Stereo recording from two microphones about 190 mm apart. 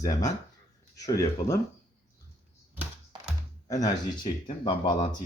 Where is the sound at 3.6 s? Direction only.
20° left (ahead or behind).